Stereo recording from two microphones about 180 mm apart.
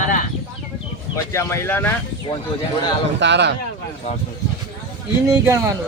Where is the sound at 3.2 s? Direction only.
75° right (ahead or behind).